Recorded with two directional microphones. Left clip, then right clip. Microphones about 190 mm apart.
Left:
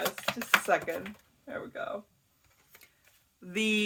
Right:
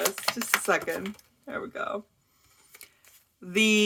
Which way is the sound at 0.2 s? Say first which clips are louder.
Even; 30° right (ahead or behind).